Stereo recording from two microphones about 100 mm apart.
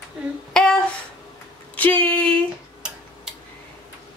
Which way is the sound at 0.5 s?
10° left (ahead or behind).